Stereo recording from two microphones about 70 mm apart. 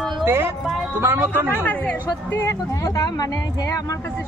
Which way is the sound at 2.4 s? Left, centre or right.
Left.